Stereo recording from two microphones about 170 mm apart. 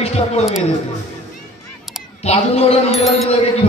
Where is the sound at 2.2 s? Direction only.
35° left (ahead or behind).